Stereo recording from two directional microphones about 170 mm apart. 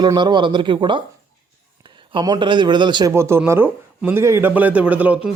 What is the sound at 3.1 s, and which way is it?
Speech, 15° right (ahead or behind).